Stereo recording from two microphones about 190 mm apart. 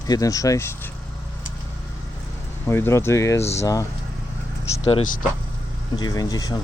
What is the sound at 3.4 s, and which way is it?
Speech, 35° left (ahead or behind).